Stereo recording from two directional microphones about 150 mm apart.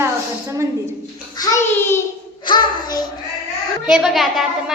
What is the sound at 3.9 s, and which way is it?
Speech, centre (ahead or behind).